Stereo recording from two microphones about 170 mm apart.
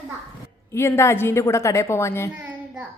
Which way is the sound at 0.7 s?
15° left (ahead or behind).